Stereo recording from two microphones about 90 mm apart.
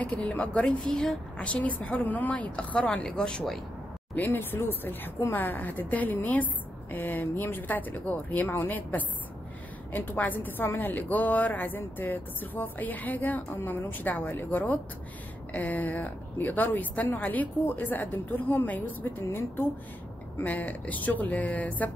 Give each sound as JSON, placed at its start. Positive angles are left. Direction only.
{"t": 0.0, "sound": "a woman's voice", "side_deg": 15}
{"t": 4.1, "sound": "a woman's voice", "side_deg": 20}